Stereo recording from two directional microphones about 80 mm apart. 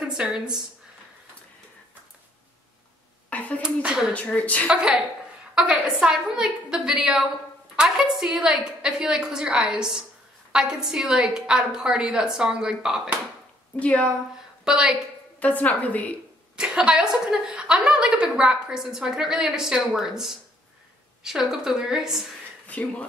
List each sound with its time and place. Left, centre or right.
0.1 s speech: centre
3.3 s a sound: centre
3.6 s a woman's voice: centre
4.1 s a woman's voice: centre
4.6 s a woman's voice: centre
13.7 s speech: centre
14.6 s a woman's voice: centre
15.4 s a woman's voice: centre
16.5 s a woman's voice: centre
22.7 s a woman's voice: centre